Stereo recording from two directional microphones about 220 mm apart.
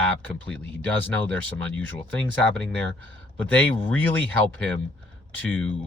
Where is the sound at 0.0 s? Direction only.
5° left (ahead or behind).